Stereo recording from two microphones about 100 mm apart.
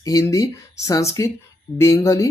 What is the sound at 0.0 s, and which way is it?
Speech, 35° left (ahead or behind).